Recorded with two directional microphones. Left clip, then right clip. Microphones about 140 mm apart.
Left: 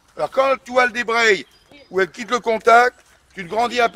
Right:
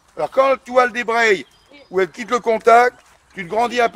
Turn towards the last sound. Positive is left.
turn(degrees=-50)  # may be behind; listen again after turning